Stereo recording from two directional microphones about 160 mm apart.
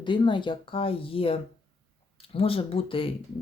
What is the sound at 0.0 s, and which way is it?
Speech, 30° left (ahead or behind).